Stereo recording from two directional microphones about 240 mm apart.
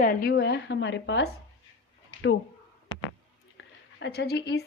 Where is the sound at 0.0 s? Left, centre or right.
Left.